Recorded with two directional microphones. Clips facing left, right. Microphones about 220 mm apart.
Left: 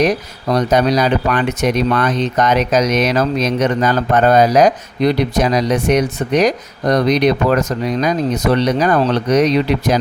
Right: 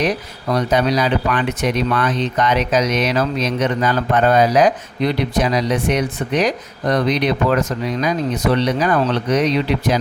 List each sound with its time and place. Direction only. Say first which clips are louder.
0.5 s speech: left 3 dB; 45° left (ahead or behind)